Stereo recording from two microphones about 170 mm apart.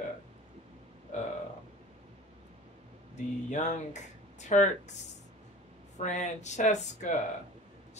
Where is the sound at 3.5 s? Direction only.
45° left (ahead or behind).